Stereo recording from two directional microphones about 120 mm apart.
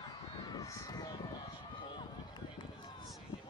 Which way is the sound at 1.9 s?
40° left (ahead or behind).